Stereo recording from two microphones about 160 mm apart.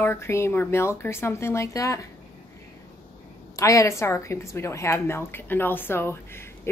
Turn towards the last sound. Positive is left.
turn(degrees=15)  # may be behind; listen again after turning